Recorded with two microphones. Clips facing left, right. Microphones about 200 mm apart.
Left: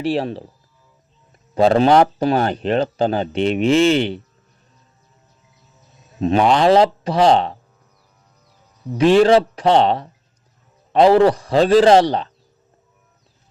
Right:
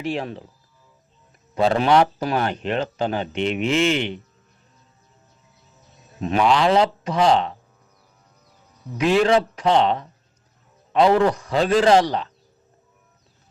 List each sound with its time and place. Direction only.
0.0 s speech: 35° left (ahead or behind)
1.5 s speech: 35° left (ahead or behind)
6.1 s speech: 30° left (ahead or behind)
6.4 s speech: 40° left (ahead or behind)
9.0 s speech: 30° left (ahead or behind)